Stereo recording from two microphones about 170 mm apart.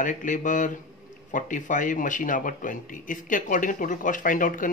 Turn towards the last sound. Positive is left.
turn(degrees=50)  # may be behind; listen again after turning